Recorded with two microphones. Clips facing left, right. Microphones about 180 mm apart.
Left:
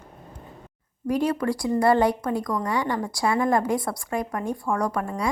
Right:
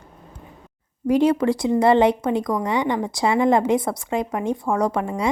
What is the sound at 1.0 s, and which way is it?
Speech, 25° right (ahead or behind).